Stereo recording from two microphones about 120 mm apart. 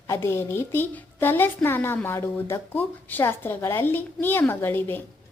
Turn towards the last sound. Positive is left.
turn(degrees=15)  # may be behind; listen again after turning